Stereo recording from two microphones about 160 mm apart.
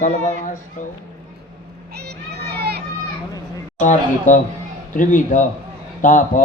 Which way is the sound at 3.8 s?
50° left (ahead or behind).